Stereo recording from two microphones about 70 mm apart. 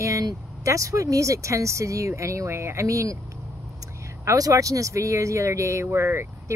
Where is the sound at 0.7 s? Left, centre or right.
Right.